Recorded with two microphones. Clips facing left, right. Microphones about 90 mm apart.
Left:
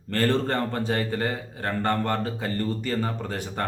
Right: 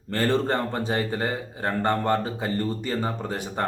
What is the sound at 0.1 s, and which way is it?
A man's voice, 20° right (ahead or behind).